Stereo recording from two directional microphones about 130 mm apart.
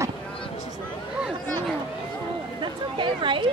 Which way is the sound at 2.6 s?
40° right (ahead or behind).